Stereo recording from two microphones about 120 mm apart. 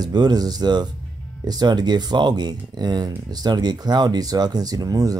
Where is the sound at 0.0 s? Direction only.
35° right (ahead or behind).